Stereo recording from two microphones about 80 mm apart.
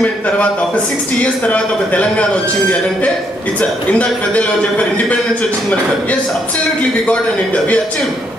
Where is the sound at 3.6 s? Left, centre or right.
Centre.